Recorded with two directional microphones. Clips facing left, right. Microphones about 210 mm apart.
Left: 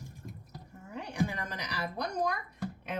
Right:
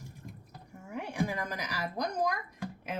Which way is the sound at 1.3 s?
10° right (ahead or behind).